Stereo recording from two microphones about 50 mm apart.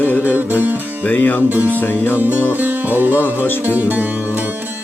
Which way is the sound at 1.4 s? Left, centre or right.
Right.